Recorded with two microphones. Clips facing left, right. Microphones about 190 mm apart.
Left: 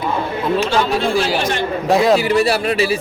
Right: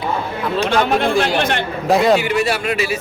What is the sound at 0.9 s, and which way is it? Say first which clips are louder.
Speech: right 1 dB; 60° right (ahead or behind).